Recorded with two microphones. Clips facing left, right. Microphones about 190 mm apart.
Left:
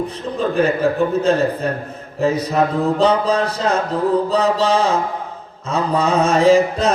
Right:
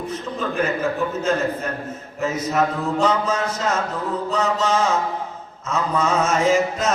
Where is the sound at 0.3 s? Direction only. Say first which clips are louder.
Left 7 dB; 35° left (ahead or behind).